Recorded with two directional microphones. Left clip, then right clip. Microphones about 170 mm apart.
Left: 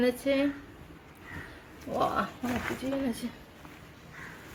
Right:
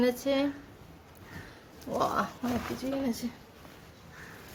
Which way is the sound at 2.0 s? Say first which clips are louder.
Even; centre (ahead or behind).